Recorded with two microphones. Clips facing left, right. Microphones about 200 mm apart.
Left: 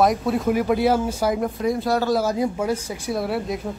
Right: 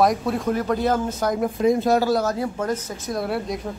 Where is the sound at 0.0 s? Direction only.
Centre (ahead or behind).